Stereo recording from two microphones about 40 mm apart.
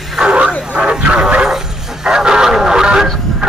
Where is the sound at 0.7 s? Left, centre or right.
Right.